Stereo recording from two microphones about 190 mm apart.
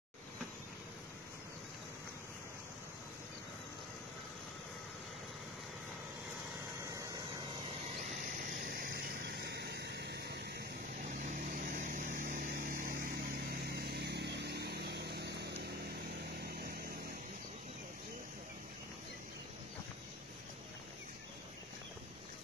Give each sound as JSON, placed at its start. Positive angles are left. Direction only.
{"t": 8.4, "sound": "vehicle", "side_deg": -50}
{"t": 11.3, "sound": "vehicle", "side_deg": -45}